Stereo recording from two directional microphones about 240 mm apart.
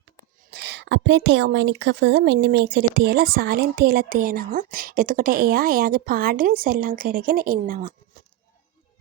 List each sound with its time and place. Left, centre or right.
0.5 s a woman's voice: right